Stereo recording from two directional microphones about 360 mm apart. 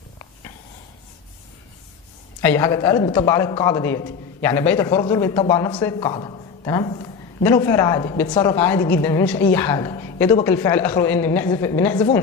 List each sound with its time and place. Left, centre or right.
2.4 s a man's voice: centre